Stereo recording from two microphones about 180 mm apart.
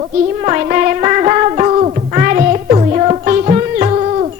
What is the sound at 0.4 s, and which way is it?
Music, 45° right (ahead or behind).